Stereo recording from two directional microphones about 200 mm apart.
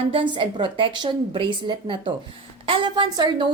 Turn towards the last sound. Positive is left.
turn(degrees=-20)  # may be behind; listen again after turning